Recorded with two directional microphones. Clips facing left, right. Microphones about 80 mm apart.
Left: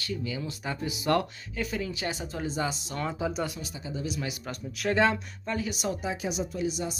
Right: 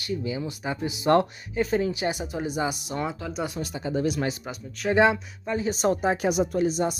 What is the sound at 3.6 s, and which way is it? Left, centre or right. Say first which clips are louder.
Speech: right 9 dB; right.